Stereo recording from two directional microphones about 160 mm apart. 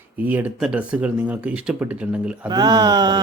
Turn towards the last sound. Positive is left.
turn(degrees=-25)  # may be behind; listen again after turning